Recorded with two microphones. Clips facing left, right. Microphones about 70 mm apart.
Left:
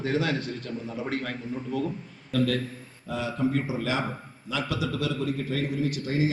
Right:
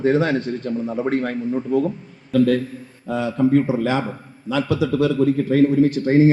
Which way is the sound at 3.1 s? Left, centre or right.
Right.